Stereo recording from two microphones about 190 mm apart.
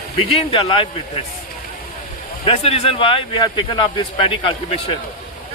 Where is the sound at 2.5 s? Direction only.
30° left (ahead or behind).